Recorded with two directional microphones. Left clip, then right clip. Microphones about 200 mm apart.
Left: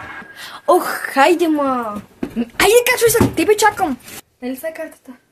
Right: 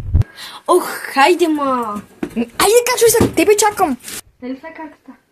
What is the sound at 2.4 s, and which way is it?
Speech, 10° right (ahead or behind).